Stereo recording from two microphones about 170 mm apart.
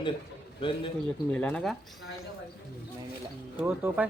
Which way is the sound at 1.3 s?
10° left (ahead or behind).